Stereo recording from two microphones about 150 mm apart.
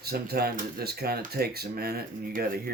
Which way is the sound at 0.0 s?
90° right.